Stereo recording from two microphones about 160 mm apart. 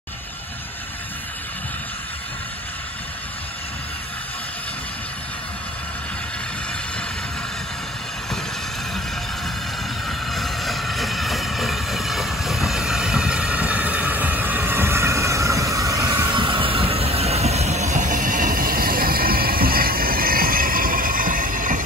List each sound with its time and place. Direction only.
10.0 s vehicle: centre (ahead or behind); by 16.3 s 20° right (ahead or behind)
16.3 s train: 30° right (ahead or behind); by 21.8 s 60° right (ahead or behind)